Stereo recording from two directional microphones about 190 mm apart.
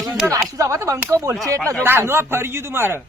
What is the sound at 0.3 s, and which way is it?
A man's voice, 15° right (ahead or behind).